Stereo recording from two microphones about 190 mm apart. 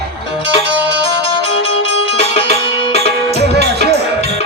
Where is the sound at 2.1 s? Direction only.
30° left (ahead or behind).